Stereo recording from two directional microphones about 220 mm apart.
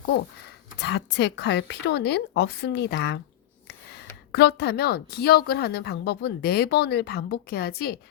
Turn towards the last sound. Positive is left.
turn(degrees=45)  # may be behind; listen again after turning